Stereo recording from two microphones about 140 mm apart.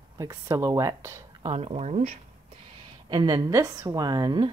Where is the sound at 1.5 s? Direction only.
45° right (ahead or behind).